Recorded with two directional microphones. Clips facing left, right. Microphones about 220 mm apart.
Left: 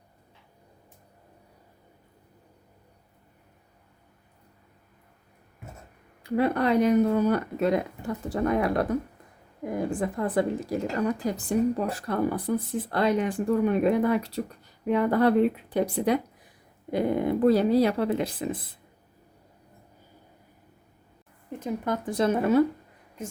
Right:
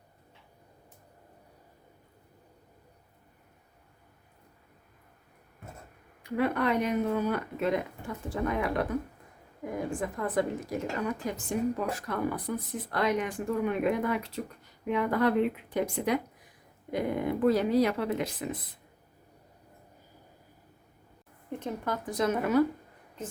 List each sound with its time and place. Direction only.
6.2 s speech: 35° left (ahead or behind)
10.0 s speech: 30° left (ahead or behind)
21.5 s a sound: 5° left (ahead or behind)
22.1 s speech: 30° left (ahead or behind)